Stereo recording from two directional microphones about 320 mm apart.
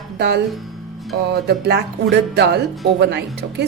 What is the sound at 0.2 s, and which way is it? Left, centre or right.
A woman's voice, right.